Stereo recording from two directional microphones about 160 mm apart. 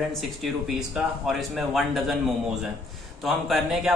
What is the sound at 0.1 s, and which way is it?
Speech, centre (ahead or behind).